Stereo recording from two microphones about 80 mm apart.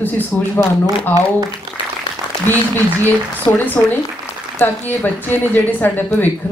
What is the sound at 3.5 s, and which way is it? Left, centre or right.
A woman's voice, left.